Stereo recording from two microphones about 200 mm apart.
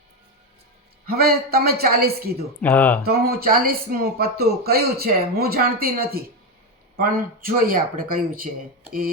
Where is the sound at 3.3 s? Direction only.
50° right (ahead or behind).